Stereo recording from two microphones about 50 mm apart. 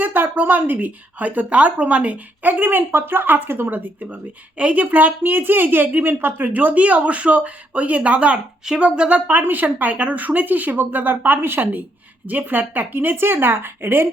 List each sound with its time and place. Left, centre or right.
0.0 s a woman's voice: right; by 9.0 s centre
9.0 s a woman's voice: right
9.4 s a woman's voice: right